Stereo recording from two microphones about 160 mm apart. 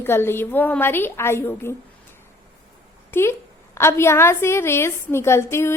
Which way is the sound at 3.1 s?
15° left (ahead or behind).